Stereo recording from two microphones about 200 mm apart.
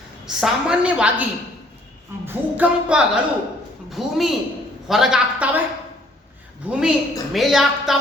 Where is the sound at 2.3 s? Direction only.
10° right (ahead or behind).